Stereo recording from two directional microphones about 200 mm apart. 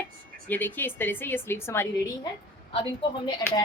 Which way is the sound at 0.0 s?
10° left (ahead or behind).